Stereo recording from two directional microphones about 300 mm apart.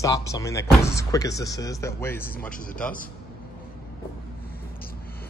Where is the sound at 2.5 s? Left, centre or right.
Left.